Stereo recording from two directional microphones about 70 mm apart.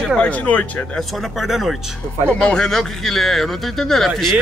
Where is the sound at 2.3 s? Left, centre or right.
Centre.